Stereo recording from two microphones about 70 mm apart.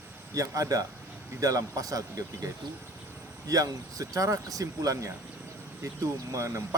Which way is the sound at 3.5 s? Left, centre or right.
Right.